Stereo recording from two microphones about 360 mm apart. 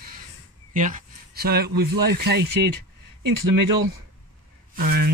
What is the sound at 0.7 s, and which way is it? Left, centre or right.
Speech, right.